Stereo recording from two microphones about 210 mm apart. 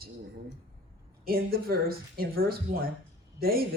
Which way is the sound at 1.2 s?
45° right (ahead or behind).